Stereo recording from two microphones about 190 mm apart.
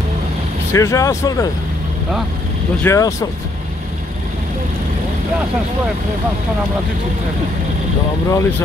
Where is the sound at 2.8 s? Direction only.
15° left (ahead or behind).